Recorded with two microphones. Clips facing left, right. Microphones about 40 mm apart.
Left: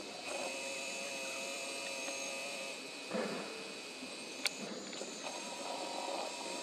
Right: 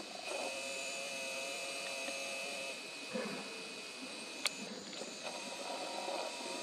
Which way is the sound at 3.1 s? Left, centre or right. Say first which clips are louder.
Left 3 dB; centre.